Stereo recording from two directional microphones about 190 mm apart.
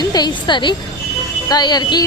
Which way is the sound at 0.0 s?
20° left (ahead or behind).